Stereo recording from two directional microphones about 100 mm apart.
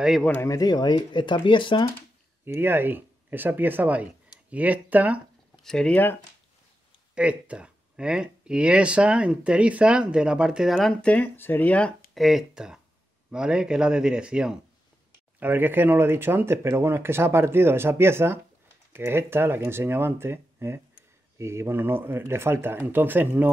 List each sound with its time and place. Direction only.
0.4 s speech: 35° left (ahead or behind); by 1.9 s 55° left (ahead or behind)
2.4 s speech: 20° right (ahead or behind)
5.6 s speech: 5° left (ahead or behind)
7.2 s speech: 10° right (ahead or behind)
10.9 s speech: 10° left (ahead or behind)
12.1 s speech: centre (ahead or behind)
15.3 s speech: 20° right (ahead or behind)